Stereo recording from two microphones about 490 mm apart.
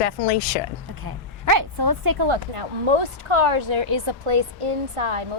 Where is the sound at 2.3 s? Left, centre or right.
Right.